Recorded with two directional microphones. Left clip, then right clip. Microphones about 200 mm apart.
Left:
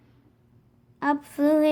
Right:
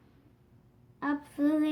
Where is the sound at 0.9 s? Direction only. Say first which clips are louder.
Left 8 dB; 45° left (ahead or behind).